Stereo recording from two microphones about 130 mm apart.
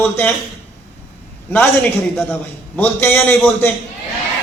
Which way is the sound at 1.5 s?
15° left (ahead or behind).